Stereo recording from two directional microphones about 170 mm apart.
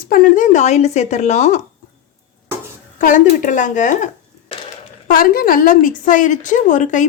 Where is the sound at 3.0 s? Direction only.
50° left (ahead or behind).